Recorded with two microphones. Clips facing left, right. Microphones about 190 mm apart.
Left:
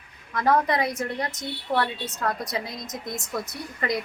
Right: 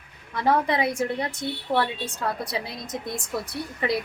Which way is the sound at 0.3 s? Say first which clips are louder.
Even; 5° right (ahead or behind).